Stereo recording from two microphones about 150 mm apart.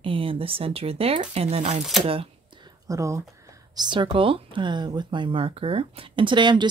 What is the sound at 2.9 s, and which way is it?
Speech, 20° right (ahead or behind).